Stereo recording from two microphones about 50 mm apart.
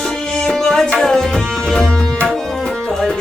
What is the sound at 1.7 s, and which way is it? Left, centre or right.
Tabla, centre.